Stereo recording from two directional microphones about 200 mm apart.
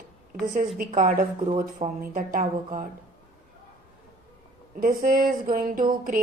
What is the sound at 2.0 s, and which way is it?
Speech, 45° right (ahead or behind).